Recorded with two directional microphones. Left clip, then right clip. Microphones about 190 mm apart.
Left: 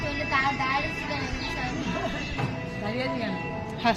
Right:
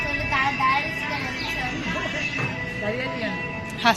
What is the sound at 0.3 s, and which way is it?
Music, 15° right (ahead or behind).